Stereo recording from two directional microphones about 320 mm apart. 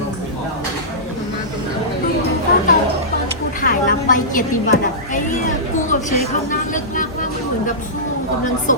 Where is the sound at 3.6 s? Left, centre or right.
Left.